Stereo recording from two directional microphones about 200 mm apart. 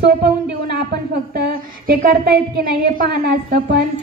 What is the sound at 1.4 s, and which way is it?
A woman's voice, 50° right (ahead or behind).